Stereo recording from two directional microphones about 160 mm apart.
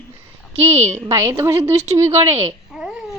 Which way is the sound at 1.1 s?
20° right (ahead or behind).